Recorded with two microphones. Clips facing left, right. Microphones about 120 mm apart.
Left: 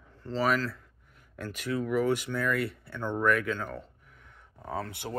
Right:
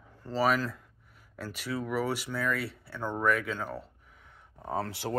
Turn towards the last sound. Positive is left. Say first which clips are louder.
# right 4 dB
turn(degrees=-35)  # may be behind; listen again after turning